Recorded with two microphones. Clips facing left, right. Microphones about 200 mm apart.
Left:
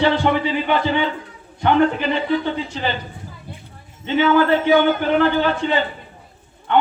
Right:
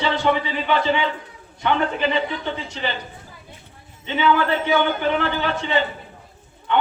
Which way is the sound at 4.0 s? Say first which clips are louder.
Left 4 dB; 50° left (ahead or behind).